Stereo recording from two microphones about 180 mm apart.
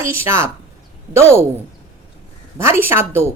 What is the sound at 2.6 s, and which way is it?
Speech, 15° right (ahead or behind).